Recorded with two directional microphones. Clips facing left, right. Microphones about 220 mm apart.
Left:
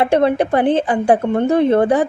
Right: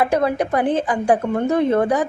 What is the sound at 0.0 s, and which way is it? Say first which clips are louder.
A woman's voice: left 4 dB; 30° left (ahead or behind).